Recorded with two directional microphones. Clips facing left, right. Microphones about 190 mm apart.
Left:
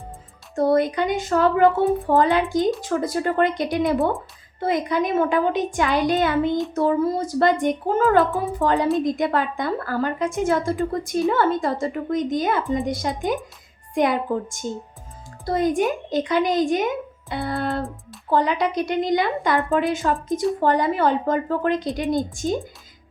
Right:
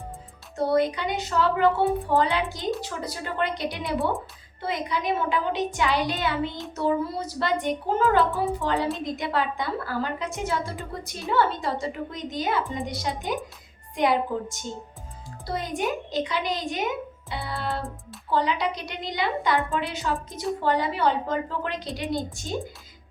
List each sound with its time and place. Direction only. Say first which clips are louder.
0.5 s speech: left 4 dB; 50° left (ahead or behind)